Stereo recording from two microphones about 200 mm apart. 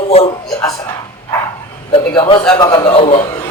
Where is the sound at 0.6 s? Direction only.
15° left (ahead or behind).